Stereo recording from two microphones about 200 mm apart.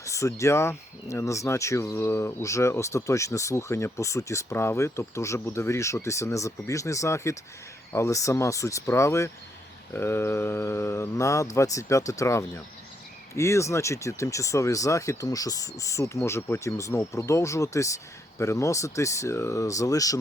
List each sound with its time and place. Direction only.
0.0 s speech: 15° left (ahead or behind)